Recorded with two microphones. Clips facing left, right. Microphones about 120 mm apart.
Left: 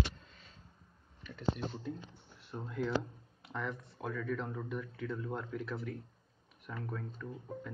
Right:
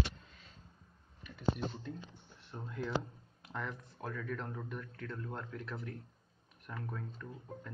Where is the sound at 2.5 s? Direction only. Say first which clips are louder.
Left 3 dB; centre (ahead or behind).